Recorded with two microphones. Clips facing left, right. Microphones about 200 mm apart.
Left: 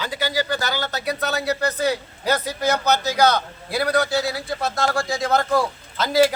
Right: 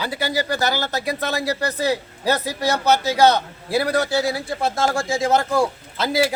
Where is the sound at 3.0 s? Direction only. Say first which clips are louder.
Right 3 dB; 25° right (ahead or behind).